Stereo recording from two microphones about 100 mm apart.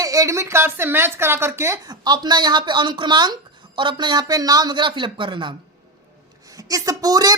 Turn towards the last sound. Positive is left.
turn(degrees=-35)  # may be behind; listen again after turning